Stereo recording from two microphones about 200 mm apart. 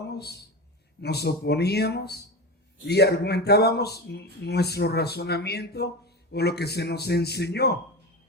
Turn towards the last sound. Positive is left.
turn(degrees=55)  # may be behind; listen again after turning